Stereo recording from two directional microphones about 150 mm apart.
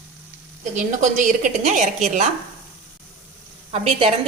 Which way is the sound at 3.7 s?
45° right (ahead or behind).